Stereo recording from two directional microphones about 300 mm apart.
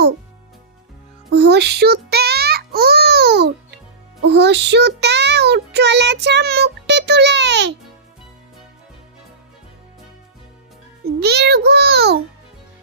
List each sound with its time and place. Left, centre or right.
1.3 s music: right
4.3 s child singing: right
11.0 s a child's voice: right